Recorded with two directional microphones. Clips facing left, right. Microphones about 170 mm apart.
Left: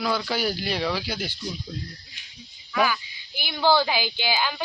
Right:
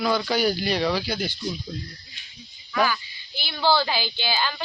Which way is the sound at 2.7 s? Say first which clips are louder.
Even; 10° left (ahead or behind).